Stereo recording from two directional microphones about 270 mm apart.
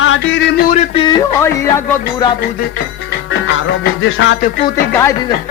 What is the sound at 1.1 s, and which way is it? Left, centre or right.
Speech, centre.